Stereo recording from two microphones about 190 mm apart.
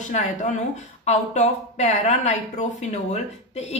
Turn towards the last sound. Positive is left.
turn(degrees=35)  # may be behind; listen again after turning